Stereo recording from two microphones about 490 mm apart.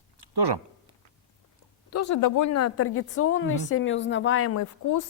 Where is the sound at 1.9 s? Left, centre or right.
Left.